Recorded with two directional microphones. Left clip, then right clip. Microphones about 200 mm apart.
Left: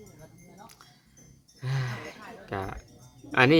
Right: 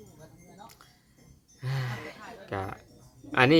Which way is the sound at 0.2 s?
40° right (ahead or behind).